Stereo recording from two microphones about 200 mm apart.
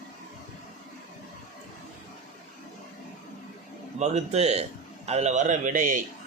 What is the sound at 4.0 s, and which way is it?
Speech, 35° right (ahead or behind).